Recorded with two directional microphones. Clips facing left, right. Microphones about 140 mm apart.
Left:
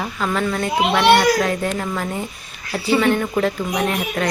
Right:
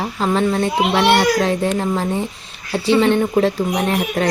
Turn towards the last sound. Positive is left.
turn(degrees=-30)  # may be behind; listen again after turning